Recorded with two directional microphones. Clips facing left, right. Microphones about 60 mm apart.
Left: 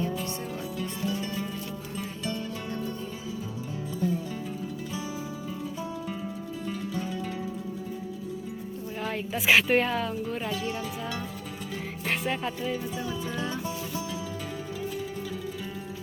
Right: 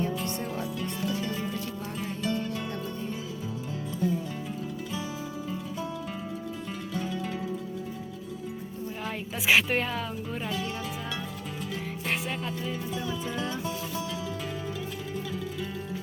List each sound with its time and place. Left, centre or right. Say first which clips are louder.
9.0 s speech: left 2 dB; centre
12.3 s speech: left 3 dB; centre